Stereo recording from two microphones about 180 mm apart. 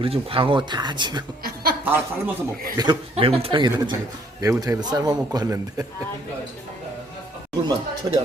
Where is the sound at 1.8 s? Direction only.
10° right (ahead or behind).